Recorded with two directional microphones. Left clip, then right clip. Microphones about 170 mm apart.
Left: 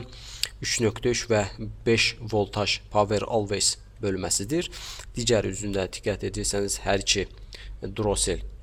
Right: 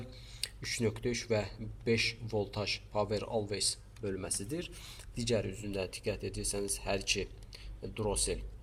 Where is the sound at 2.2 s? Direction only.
60° left (ahead or behind).